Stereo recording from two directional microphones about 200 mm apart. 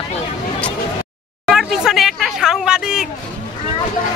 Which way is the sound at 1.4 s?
Centre (ahead or behind).